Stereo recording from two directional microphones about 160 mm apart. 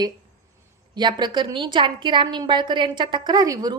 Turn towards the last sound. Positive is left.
turn(degrees=-25)  # may be behind; listen again after turning